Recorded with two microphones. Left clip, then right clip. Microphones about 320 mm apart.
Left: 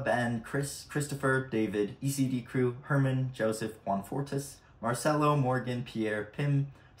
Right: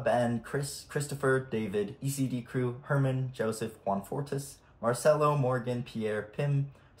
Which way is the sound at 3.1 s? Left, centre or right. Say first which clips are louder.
Even; centre.